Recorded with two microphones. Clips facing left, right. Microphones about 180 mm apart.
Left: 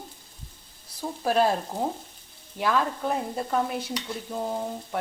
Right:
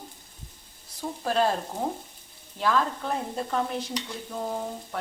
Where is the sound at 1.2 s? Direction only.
10° left (ahead or behind).